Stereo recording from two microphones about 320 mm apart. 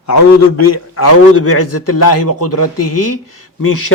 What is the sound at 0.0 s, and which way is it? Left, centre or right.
A man's voice, left.